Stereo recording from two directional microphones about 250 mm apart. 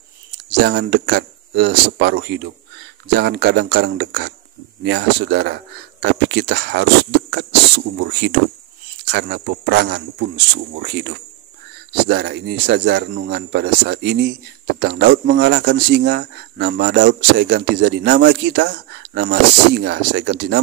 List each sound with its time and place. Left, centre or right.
0.6 s speech: right